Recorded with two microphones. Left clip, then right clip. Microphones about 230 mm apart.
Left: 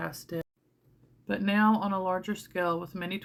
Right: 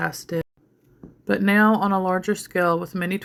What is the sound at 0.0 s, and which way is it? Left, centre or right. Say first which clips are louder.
Speech: right 10 dB; right.